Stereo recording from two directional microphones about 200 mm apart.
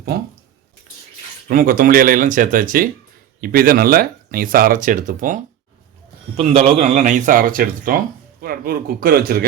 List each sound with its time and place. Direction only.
0.1 s speech: 50° right (ahead or behind)
1.5 s speech: 45° right (ahead or behind)